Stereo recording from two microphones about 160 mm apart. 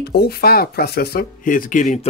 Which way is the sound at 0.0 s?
80° left.